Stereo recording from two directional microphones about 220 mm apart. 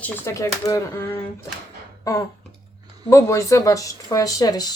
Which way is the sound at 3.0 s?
15° left (ahead or behind).